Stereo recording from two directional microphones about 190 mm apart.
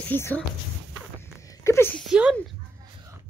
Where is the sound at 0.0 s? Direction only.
10° left (ahead or behind).